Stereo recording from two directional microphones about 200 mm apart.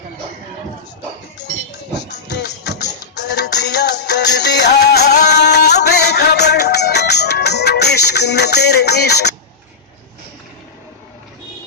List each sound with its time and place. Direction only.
2.2 s music: 55° left (ahead or behind)